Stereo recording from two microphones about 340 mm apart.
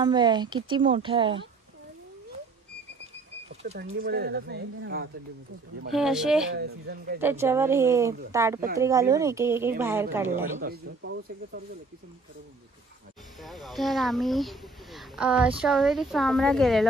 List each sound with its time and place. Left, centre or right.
0.0 s speech: centre
3.6 s speech: right
5.9 s speech: centre
6.5 s speech: right
7.2 s speech: centre
10.6 s speech: right
13.4 s speech: centre